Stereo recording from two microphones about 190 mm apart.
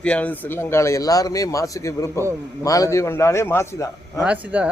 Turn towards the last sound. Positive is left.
turn(degrees=-5)  # may be behind; listen again after turning